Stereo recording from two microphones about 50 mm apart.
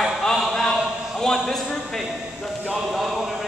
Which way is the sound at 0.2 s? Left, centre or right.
Centre.